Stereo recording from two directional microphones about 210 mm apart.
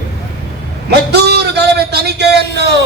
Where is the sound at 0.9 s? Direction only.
50° right (ahead or behind).